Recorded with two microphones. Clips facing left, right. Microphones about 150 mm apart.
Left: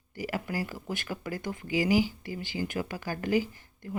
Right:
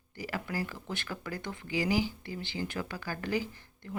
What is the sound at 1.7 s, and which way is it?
Speech, 10° left (ahead or behind).